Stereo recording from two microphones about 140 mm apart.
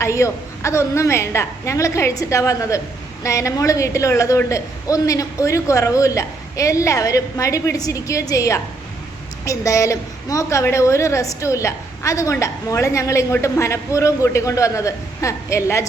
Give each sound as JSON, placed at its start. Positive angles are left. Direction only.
{"t": 0.0, "sound": "a woman's voice", "side_deg": 20}